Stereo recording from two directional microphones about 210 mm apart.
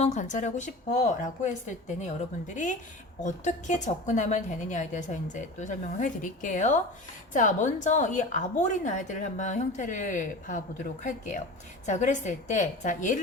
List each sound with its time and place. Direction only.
0.0 s a woman's voice: 35° left (ahead or behind)
3.2 s a woman's voice: 35° left (ahead or behind)